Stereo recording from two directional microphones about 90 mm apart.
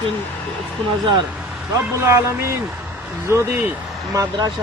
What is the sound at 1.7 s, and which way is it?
Speech, 35° right (ahead or behind).